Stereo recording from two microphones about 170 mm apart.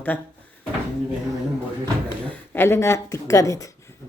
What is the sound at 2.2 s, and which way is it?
Speech, 10° left (ahead or behind).